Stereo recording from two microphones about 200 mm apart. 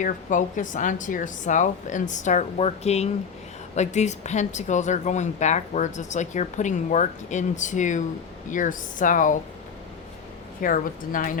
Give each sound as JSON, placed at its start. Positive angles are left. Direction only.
{"t": 0.0, "sound": "a woman's voice", "side_deg": 40}
{"t": 10.6, "sound": "a woman's voice", "side_deg": 45}